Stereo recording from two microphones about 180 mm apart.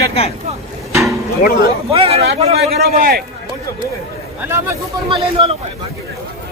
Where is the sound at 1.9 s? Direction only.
35° right (ahead or behind).